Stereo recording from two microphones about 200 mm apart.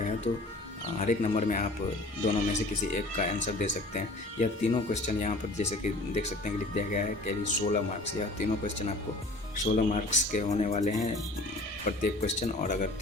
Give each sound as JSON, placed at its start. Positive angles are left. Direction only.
{"t": 0.9, "sound": "speech", "side_deg": 35}